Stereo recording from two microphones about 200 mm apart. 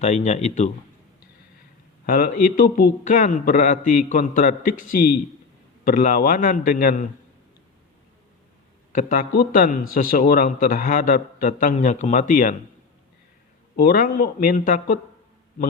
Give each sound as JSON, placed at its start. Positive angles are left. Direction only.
{"t": 0.0, "sound": "a man's voice", "side_deg": 35}
{"t": 2.0, "sound": "a man's voice", "side_deg": 45}
{"t": 8.9, "sound": "a man's voice", "side_deg": 40}
{"t": 13.7, "sound": "a man's voice", "side_deg": 45}